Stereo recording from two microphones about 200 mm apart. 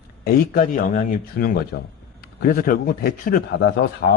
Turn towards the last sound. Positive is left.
turn(degrees=55)  # may be behind; listen again after turning